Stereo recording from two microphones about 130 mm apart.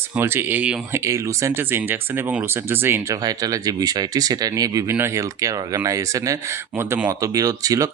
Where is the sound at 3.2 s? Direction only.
30° right (ahead or behind).